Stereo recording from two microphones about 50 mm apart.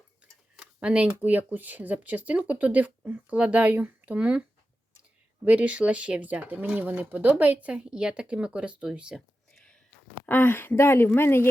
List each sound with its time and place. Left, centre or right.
0.2 s a sound: right
0.8 s speech: right
1.2 s speech: right
5.5 s speech: right
10.2 s speech: left